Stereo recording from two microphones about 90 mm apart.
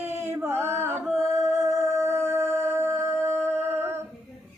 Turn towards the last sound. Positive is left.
turn(degrees=-25)  # may be behind; listen again after turning